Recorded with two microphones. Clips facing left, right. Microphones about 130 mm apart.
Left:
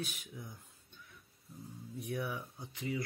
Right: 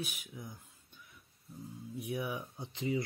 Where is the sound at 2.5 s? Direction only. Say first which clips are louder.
Right 4 dB; 25° right (ahead or behind).